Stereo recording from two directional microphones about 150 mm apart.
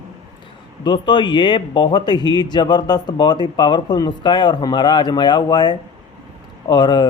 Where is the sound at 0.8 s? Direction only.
30° left (ahead or behind).